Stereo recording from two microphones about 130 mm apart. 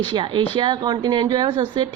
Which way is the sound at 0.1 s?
35° right (ahead or behind).